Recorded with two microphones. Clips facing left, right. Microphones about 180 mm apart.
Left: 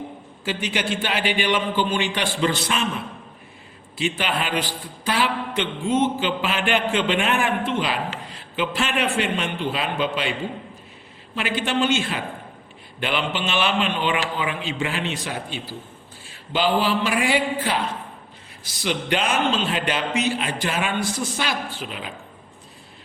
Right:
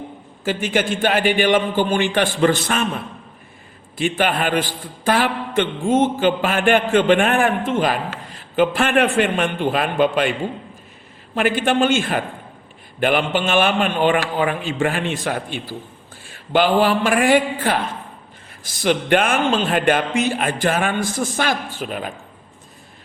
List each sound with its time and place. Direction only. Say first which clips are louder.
0.4 s a man's voice: right 5 dB; 50° right (ahead or behind)
3.9 s a man's voice: right 5 dB; 50° right (ahead or behind)
11.3 s a man's voice: right 6 dB; 50° right (ahead or behind)